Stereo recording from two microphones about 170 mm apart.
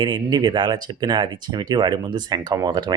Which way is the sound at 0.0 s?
25° right (ahead or behind).